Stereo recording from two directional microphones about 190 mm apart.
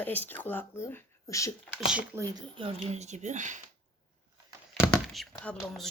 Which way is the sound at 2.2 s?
25° right (ahead or behind).